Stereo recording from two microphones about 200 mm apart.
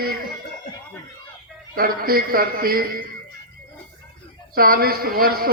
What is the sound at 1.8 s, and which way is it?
A man's voice, 50° right (ahead or behind).